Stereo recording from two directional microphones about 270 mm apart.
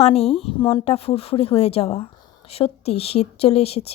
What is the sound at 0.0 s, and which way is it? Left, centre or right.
Speech, left.